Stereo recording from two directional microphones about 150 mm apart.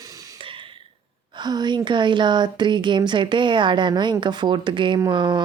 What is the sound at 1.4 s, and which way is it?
Speech, 30° right (ahead or behind).